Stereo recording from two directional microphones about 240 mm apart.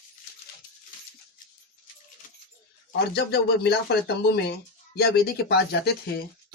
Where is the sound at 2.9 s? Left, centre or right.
Left.